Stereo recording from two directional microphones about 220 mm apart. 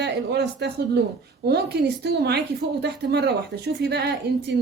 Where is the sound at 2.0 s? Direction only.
50° right (ahead or behind).